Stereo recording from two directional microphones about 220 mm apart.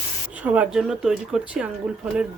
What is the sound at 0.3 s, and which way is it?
Speech, 5° right (ahead or behind).